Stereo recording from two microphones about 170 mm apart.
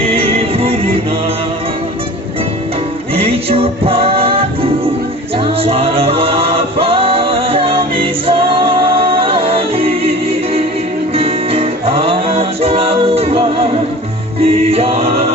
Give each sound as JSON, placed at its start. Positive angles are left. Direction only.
{"t": 0.1, "sound": "music", "side_deg": -35}
{"t": 3.2, "sound": "music", "side_deg": -35}
{"t": 11.1, "sound": "music", "side_deg": -35}